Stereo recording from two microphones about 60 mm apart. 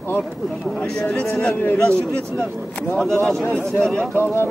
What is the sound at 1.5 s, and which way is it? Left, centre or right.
Speech, left.